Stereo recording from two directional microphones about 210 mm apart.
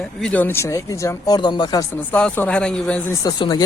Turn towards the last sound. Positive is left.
turn(degrees=20)  # may be behind; listen again after turning